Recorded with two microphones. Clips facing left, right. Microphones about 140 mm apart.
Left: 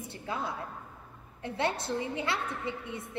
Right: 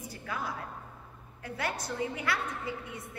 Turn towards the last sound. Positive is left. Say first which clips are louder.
# left 2 dB
turn(degrees=25)  # may be behind; listen again after turning